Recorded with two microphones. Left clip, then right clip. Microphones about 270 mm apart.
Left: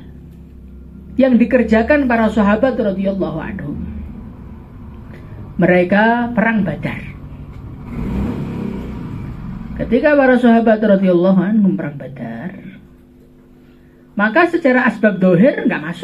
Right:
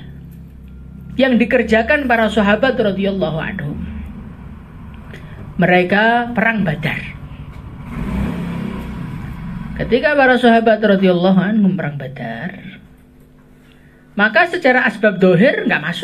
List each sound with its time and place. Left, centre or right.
1.1 s speech: right
5.1 s speech: right
9.8 s a man's voice: right
14.1 s a man's voice: right